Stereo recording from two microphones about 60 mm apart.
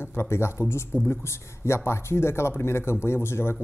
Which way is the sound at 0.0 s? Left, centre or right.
Left.